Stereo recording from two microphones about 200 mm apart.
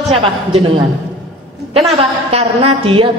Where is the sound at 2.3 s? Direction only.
30° right (ahead or behind).